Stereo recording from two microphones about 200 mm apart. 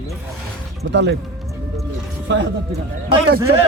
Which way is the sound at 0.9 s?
60° right (ahead or behind).